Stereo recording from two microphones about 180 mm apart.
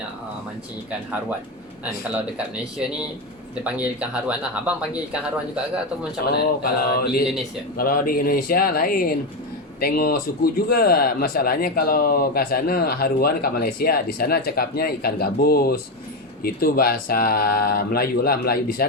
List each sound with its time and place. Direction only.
3.6 s speech: 5° right (ahead or behind)
6.3 s speech: 60° left (ahead or behind)